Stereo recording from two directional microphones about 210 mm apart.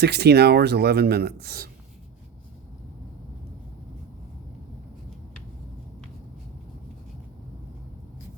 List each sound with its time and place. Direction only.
0.0 s speech: 50° right (ahead or behind)